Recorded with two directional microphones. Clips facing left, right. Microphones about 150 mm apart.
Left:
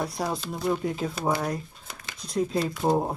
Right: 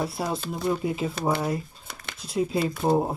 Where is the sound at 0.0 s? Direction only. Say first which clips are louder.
Right 1 dB; 5° right (ahead or behind).